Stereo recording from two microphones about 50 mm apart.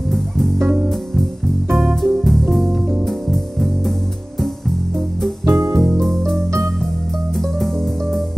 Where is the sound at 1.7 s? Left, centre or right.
Right.